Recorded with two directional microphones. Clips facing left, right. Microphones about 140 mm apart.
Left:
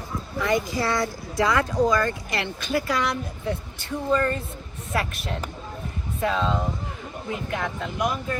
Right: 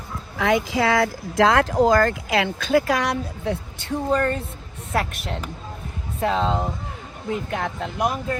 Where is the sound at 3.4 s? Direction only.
45° right (ahead or behind).